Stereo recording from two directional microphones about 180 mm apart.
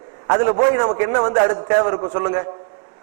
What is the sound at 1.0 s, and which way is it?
A man's voice, 25° right (ahead or behind).